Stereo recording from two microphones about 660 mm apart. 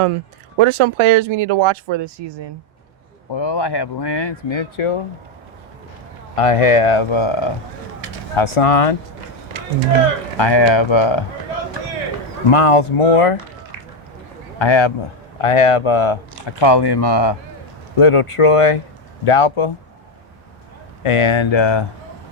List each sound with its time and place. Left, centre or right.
0.6 s speech: right
3.3 s speech: left
6.3 s speech: left
10.3 s speech: left
12.5 s speech: left
14.6 s speech: left
18.0 s speech: left
21.0 s speech: left